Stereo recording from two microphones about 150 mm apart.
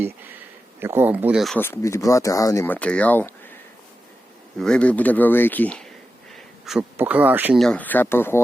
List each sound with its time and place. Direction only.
0.8 s speech: 15° right (ahead or behind)
1.5 s speech: 15° left (ahead or behind)
4.6 s speech: 5° left (ahead or behind)
6.3 s a sound: centre (ahead or behind)
6.9 s speech: 10° right (ahead or behind)
7.6 s speech: 10° left (ahead or behind)